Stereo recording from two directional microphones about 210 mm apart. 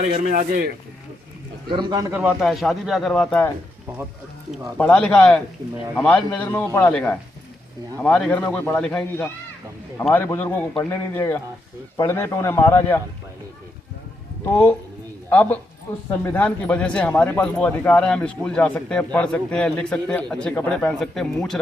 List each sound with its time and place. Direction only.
0.0 s a man's voice: 35° right (ahead or behind)
1.7 s speech: 20° right (ahead or behind); by 3.5 s 5° left (ahead or behind)
4.8 s speech: 5° left (ahead or behind)
15.3 s speech: 10° left (ahead or behind)